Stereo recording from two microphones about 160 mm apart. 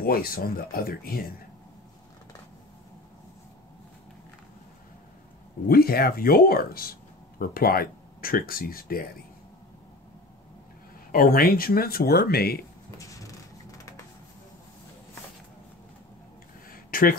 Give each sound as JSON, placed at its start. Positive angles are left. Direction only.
{"t": 0.0, "sound": "speech", "side_deg": 70}
{"t": 5.7, "sound": "speech", "side_deg": 70}
{"t": 11.1, "sound": "speech", "side_deg": 65}
{"t": 12.9, "sound": "a sound", "side_deg": 20}
{"t": 16.9, "sound": "speech", "side_deg": 65}